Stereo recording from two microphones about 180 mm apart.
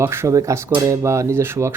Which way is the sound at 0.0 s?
15° right (ahead or behind).